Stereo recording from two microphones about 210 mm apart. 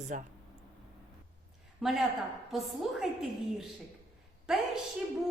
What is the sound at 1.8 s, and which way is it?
A woman's voice, centre (ahead or behind).